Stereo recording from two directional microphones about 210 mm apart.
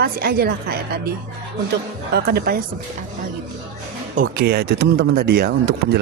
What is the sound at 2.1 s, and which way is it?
Speech, 50° right (ahead or behind).